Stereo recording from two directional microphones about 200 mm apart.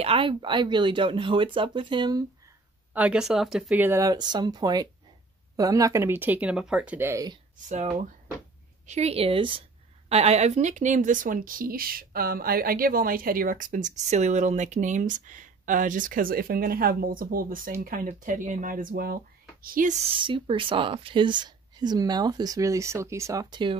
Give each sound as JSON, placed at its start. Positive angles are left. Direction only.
{"t": 0.0, "sound": "speech", "side_deg": -25}
{"t": 2.9, "sound": "speech", "side_deg": -5}
{"t": 7.6, "sound": "a woman's voice", "side_deg": -35}
{"t": 20.1, "sound": "speech", "side_deg": -25}